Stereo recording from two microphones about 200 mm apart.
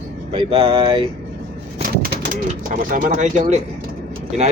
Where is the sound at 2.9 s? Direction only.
40° right (ahead or behind).